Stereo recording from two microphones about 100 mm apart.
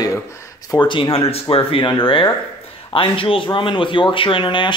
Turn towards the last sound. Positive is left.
turn(degrees=55)  # may be behind; listen again after turning